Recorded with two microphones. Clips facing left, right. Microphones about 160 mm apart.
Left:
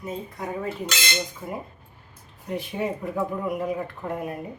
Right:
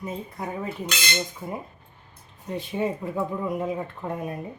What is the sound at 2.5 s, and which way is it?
Speech, 15° left (ahead or behind).